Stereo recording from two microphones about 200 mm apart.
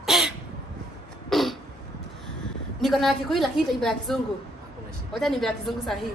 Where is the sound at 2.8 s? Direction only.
Centre (ahead or behind).